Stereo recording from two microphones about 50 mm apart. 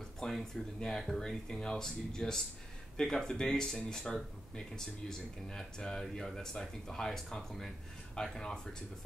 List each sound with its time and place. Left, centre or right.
0.2 s speech: centre